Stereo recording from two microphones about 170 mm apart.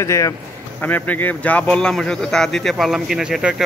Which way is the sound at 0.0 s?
15° left (ahead or behind).